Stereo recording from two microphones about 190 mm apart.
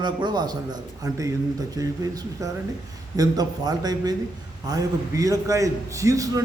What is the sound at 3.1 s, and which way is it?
A man's voice, 20° right (ahead or behind).